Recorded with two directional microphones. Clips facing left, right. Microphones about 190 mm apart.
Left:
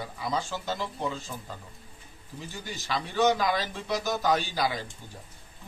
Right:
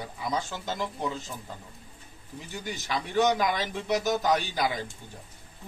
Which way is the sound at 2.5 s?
15° right (ahead or behind).